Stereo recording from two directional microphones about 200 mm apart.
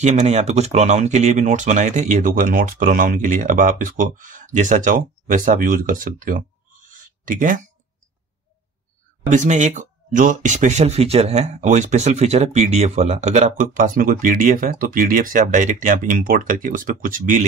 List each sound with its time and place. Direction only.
0.0 s speech: 35° right (ahead or behind)
6.9 s a sound: 40° right (ahead or behind)
9.3 s speech: 40° right (ahead or behind)